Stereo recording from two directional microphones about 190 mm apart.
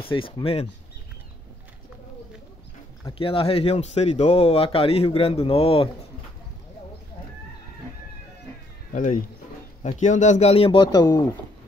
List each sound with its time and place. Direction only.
0.0 s speech: 30° left (ahead or behind)
3.1 s speech: 30° left (ahead or behind)
8.9 s speech: 45° left (ahead or behind); by 11.2 s 20° left (ahead or behind)